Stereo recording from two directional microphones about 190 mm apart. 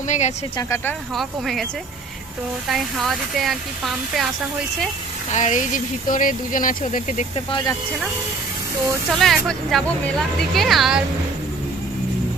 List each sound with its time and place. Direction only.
0.1 s speech: 35° left (ahead or behind)
0.5 s speech: 15° left (ahead or behind)
1.1 s speech: centre (ahead or behind)
2.6 s speech: centre (ahead or behind)
5.3 s speech: 40° left (ahead or behind)
9.1 s speech: centre (ahead or behind)